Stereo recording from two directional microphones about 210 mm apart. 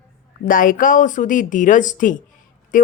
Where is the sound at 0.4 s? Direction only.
40° left (ahead or behind).